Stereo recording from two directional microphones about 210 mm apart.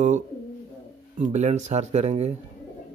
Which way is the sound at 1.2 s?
35° right (ahead or behind).